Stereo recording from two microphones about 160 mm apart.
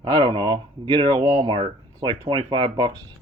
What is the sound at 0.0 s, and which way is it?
Speech, 30° right (ahead or behind).